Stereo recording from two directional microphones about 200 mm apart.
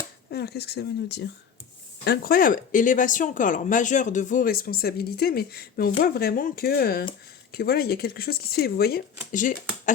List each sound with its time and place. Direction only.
0.3 s speech: 55° left (ahead or behind)
2.0 s speech: 45° left (ahead or behind)